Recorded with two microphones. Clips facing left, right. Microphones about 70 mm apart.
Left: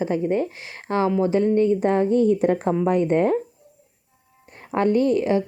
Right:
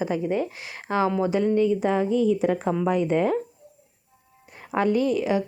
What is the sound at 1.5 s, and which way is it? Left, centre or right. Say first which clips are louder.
Speech: left 3 dB; left.